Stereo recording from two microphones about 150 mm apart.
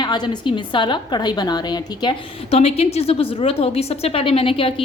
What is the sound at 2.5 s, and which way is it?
A woman's voice, 45° left (ahead or behind).